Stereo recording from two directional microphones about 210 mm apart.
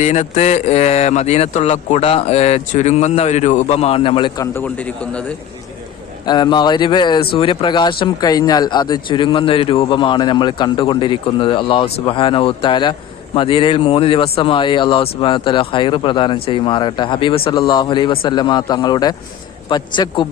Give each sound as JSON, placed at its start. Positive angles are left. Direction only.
{"t": 0.0, "sound": "speech", "side_deg": 35}
{"t": 4.5, "sound": "a man's voice", "side_deg": 5}
{"t": 6.2, "sound": "speech", "side_deg": 20}